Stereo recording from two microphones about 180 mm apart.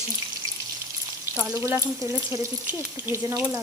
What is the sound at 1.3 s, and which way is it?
Frying, 10° right (ahead or behind).